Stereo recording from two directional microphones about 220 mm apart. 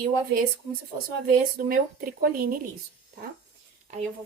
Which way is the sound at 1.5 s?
40° right (ahead or behind).